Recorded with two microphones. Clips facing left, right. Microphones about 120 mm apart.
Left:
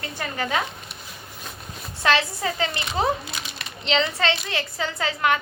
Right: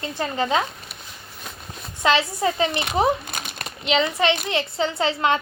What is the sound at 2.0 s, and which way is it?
Speech, 20° right (ahead or behind).